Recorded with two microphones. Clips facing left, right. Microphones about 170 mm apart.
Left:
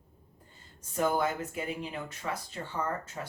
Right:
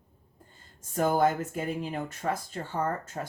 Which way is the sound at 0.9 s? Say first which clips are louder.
Right 4 dB; 45° right (ahead or behind).